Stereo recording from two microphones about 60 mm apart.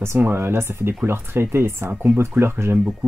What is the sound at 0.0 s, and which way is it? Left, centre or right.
Speech, right.